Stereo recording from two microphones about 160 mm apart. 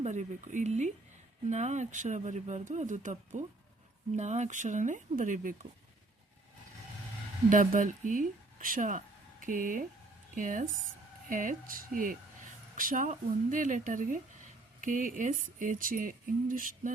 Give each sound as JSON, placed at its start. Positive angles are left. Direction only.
{"t": 0.0, "sound": "speech", "side_deg": -50}
{"t": 7.5, "sound": "speech", "side_deg": -55}